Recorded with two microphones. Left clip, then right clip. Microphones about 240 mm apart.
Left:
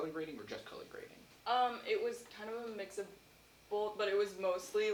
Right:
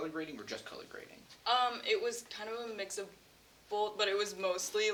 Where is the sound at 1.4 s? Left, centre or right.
Right.